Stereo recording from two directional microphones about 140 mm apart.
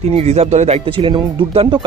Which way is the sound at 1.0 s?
35° right (ahead or behind).